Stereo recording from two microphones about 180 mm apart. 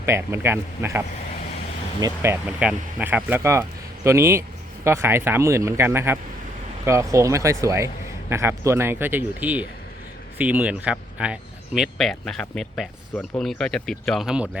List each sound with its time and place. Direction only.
0.0 s speech: 15° right (ahead or behind)